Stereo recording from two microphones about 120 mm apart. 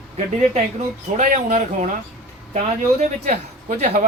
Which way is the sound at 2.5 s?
70° right (ahead or behind).